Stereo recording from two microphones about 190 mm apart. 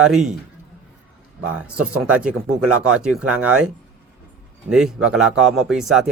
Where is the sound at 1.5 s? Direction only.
5° right (ahead or behind).